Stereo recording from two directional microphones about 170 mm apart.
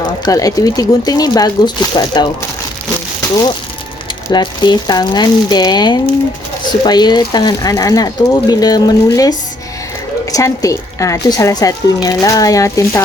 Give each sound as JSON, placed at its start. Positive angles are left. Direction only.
{"t": 0.3, "sound": "speech", "side_deg": 20}
{"t": 4.3, "sound": "speech", "side_deg": 25}
{"t": 10.3, "sound": "speech", "side_deg": 20}